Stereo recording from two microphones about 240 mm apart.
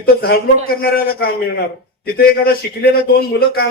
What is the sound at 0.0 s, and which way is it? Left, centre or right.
Speech, left.